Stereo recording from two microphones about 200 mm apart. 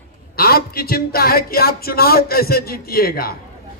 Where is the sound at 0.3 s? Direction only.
50° left (ahead or behind).